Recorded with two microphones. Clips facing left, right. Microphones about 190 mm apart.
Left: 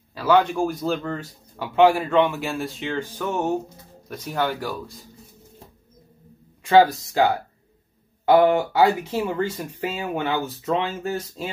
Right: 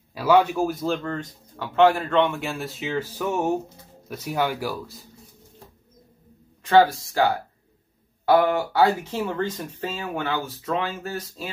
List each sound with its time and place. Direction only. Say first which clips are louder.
0.1 s a man's voice: even; 10° right (ahead or behind)
6.6 s speech: left 1 dB; 15° left (ahead or behind)
8.3 s speech: left 3 dB; 20° left (ahead or behind)